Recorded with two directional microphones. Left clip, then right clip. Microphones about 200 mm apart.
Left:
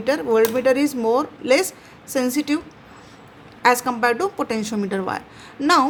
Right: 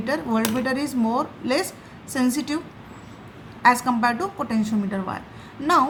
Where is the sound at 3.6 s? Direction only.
35° left (ahead or behind).